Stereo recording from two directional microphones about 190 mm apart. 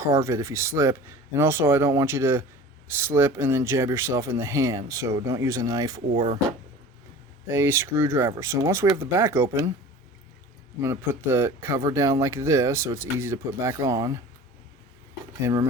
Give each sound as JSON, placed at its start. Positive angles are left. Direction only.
{"t": 0.0, "sound": "speech", "side_deg": -15}
{"t": 6.1, "sound": "speech", "side_deg": -35}
{"t": 7.4, "sound": "speech", "side_deg": -15}
{"t": 10.8, "sound": "speech", "side_deg": -15}
{"t": 15.4, "sound": "speech", "side_deg": -15}